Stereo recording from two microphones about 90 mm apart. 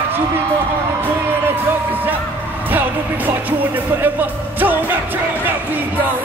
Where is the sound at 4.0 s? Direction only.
20° right (ahead or behind).